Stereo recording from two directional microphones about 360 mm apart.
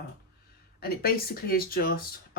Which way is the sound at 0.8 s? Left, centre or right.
Left.